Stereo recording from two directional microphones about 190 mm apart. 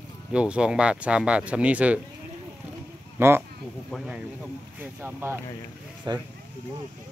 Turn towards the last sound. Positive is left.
turn(degrees=-20)  # may be behind; listen again after turning